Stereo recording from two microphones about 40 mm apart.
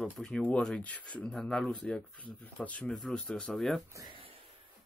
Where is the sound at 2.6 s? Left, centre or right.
Left.